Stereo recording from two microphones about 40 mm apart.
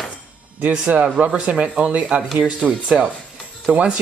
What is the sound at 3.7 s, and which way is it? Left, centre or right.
Speech, right.